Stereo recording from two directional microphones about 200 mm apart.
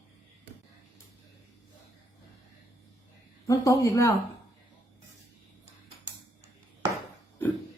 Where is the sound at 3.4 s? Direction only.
15° left (ahead or behind).